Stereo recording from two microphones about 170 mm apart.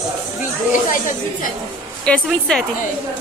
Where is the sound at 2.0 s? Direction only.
5° left (ahead or behind).